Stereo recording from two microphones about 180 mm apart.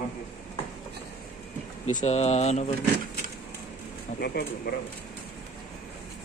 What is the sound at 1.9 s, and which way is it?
Speech, 40° left (ahead or behind).